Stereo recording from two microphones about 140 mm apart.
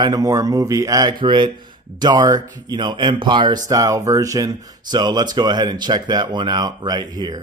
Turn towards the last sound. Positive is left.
turn(degrees=-30)  # may be behind; listen again after turning